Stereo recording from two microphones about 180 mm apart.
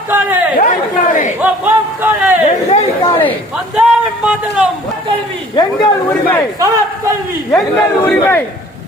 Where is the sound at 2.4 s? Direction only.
35° left (ahead or behind).